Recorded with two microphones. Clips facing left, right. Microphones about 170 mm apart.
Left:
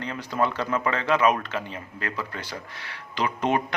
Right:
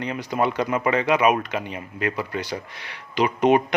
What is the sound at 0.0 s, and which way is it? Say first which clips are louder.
Speech: right 3 dB; 15° right (ahead or behind).